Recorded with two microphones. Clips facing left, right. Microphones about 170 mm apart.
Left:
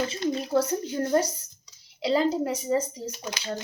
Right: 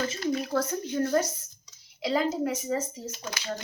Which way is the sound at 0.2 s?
25° left (ahead or behind).